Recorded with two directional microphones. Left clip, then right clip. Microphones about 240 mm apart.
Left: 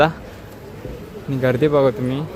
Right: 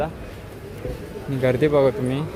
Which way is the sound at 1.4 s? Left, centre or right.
Centre.